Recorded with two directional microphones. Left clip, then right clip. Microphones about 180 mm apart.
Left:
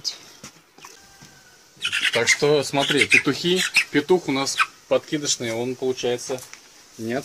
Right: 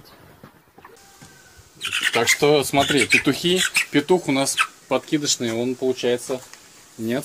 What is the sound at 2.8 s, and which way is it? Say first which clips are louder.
Speech: left 1 dB; centre (ahead or behind).